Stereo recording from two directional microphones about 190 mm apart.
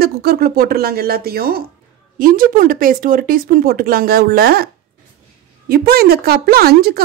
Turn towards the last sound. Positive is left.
turn(degrees=-55)  # may be behind; listen again after turning